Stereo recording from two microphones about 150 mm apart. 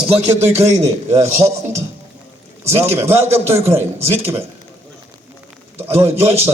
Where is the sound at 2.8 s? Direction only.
15° right (ahead or behind).